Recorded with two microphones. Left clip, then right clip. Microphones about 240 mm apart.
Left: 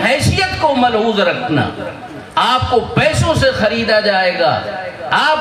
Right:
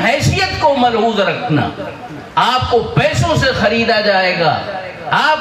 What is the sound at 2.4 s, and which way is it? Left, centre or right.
A man's voice, left.